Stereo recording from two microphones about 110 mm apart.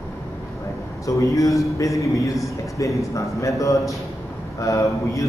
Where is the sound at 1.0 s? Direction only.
30° left (ahead or behind).